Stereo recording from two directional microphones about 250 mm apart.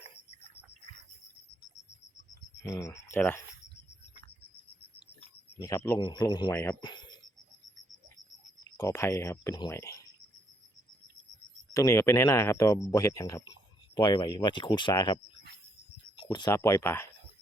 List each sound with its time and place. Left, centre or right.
2.6 s speech: centre
5.5 s speech: centre
8.6 s speech: centre
11.7 s speech: centre